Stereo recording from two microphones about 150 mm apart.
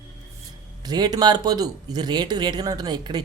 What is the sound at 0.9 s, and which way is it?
Speech, 25° right (ahead or behind).